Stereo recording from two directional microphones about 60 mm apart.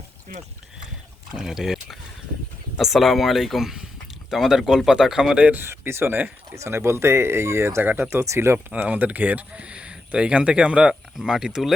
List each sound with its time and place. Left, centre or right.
1.4 s speech: centre
5.5 s speech: right
7.8 s speech: right
8.1 s speech: right
8.8 s speech: right; by 11.7 s centre